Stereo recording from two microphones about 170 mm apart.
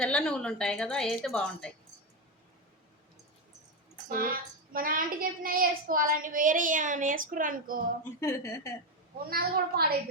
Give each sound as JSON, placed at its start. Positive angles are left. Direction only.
{"t": 0.0, "sound": "a woman's voice", "side_deg": 5}
{"t": 4.1, "sound": "a child's voice", "side_deg": -55}
{"t": 8.2, "sound": "a woman's voice", "side_deg": 20}
{"t": 9.3, "sound": "a woman's voice", "side_deg": -65}